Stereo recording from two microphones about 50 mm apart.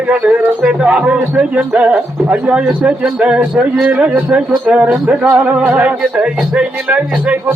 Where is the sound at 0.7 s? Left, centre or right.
Centre.